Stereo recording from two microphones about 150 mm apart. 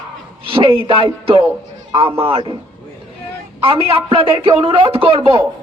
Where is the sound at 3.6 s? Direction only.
40° right (ahead or behind).